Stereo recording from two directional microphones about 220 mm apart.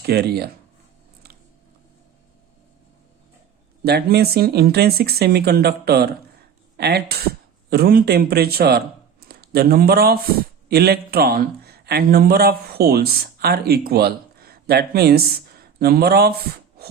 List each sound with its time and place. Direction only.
0.0 s speech: 45° right (ahead or behind)
3.8 s a man's voice: 45° right (ahead or behind)